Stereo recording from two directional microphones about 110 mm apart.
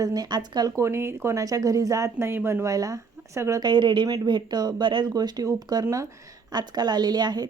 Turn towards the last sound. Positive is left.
turn(degrees=-40)  # may be behind; listen again after turning